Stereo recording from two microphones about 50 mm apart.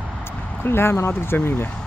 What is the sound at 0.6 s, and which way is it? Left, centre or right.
Speech, left.